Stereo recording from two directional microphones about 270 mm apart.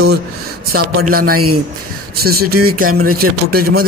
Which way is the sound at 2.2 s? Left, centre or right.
Right.